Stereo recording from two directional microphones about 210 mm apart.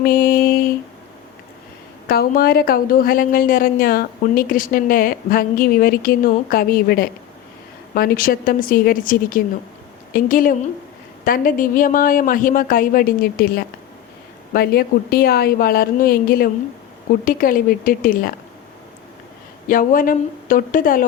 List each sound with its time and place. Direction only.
0.0 s mantra: 45° left (ahead or behind)
2.0 s a woman's voice: 45° left (ahead or behind)
19.6 s speech: 40° left (ahead or behind)